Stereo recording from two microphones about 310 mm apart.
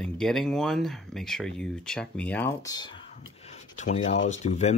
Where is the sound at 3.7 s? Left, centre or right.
Left.